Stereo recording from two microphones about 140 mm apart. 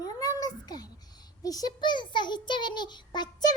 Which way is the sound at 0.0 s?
25° left (ahead or behind).